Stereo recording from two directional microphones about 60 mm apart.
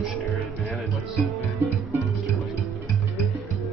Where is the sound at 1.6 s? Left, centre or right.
Right.